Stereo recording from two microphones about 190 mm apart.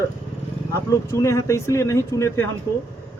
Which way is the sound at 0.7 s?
15° left (ahead or behind).